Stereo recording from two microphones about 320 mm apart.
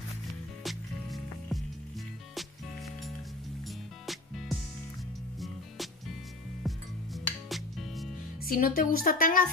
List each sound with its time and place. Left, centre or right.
0.7 s music: centre
4.0 s music: centre
6.7 s music: centre
8.5 s a woman's voice: left